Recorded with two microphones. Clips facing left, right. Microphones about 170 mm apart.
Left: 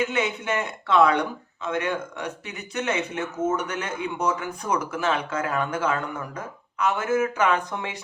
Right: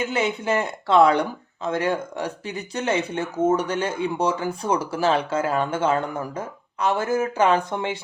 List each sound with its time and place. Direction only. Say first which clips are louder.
0.0 s speech: right 2 dB; 30° right (ahead or behind)